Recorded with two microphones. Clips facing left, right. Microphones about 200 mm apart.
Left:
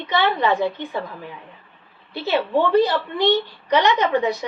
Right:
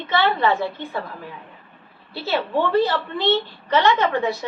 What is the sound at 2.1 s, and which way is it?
A woman's voice, 15° left (ahead or behind).